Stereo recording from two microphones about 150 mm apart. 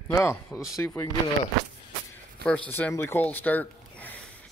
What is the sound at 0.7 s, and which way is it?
Speech, 20° left (ahead or behind).